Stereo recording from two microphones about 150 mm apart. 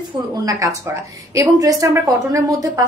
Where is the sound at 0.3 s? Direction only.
20° right (ahead or behind).